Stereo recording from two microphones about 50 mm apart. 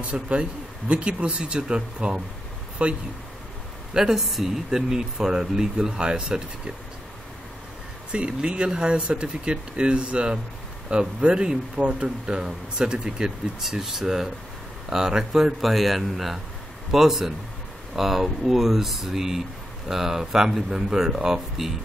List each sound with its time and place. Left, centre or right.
0.0 s speech: right
3.9 s speech: centre
8.1 s speech: right